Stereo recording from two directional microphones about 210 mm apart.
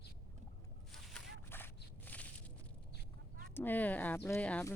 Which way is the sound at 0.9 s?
5° left (ahead or behind).